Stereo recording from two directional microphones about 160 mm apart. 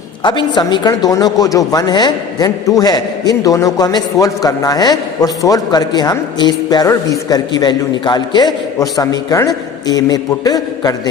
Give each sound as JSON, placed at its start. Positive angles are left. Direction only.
{"t": 0.2, "sound": "speech", "side_deg": 30}